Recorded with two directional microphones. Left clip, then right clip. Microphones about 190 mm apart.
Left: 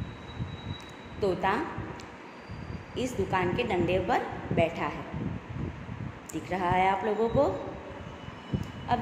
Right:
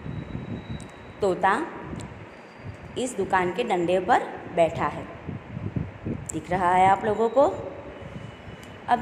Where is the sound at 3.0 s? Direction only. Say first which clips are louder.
Right 5 dB; 25° right (ahead or behind).